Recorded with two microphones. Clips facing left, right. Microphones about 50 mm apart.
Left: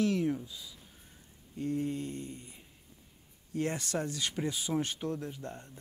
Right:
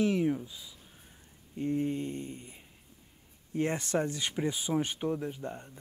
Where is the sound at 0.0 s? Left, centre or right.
Centre.